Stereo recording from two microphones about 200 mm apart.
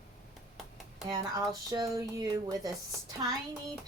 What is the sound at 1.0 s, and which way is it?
Speech, 20° right (ahead or behind).